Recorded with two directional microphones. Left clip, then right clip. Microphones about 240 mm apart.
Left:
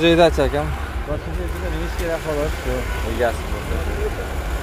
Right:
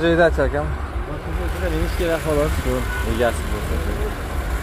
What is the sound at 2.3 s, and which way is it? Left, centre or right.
Speech, right.